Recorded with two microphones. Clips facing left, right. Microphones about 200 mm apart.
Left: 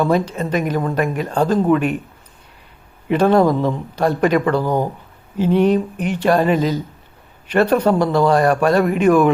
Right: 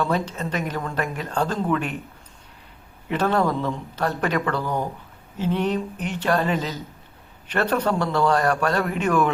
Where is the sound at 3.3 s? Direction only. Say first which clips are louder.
Left 8 dB; 10° left (ahead or behind).